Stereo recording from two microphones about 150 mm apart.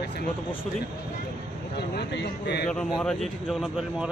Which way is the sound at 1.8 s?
90° left.